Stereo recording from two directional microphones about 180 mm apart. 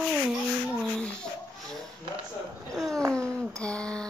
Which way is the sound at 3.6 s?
5° left (ahead or behind).